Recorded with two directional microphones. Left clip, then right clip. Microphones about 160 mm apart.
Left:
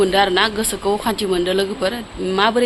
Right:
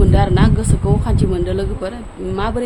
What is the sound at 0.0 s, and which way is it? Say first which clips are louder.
Speech: left 3 dB; centre (ahead or behind).